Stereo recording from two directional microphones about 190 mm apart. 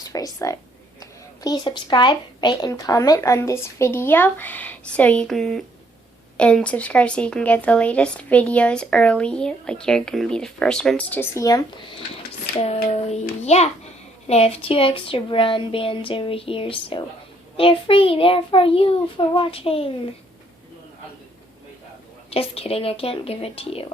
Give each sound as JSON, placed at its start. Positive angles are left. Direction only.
{"t": 0.1, "sound": "a woman's voice", "side_deg": 15}
{"t": 12.5, "sound": "a child's voice", "side_deg": 35}
{"t": 22.3, "sound": "speech", "side_deg": 30}